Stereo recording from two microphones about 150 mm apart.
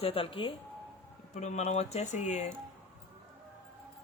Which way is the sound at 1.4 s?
50° left (ahead or behind).